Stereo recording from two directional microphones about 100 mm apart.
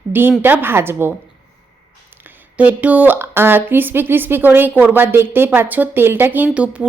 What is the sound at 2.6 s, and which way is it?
Speech, 15° right (ahead or behind).